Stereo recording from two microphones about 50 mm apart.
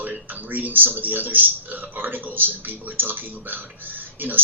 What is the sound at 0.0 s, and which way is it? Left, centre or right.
Speech, right.